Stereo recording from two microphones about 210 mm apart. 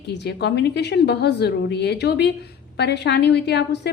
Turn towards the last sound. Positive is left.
turn(degrees=55)  # may be behind; listen again after turning